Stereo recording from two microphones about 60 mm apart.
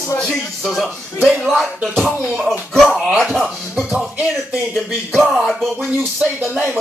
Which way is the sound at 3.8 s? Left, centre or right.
Right.